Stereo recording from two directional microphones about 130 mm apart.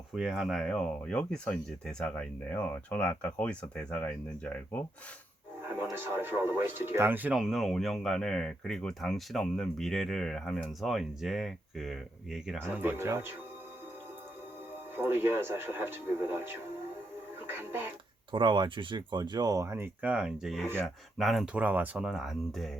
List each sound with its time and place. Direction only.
0.1 s speech: 5° right (ahead or behind); by 4.9 s 15° left (ahead or behind)
5.6 s speech: 15° right (ahead or behind)
12.8 s speech: 15° right (ahead or behind)
14.9 s speech: 15° right (ahead or behind)
17.4 s music: 15° right (ahead or behind)
18.3 s speech: 35° right (ahead or behind); by 22.7 s centre (ahead or behind)